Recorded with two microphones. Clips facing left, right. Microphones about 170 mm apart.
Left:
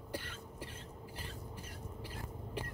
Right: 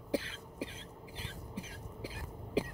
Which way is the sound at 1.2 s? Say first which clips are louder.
Right 5 dB; 90° right.